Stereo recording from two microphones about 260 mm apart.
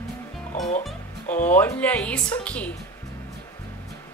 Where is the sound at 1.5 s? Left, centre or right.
Centre.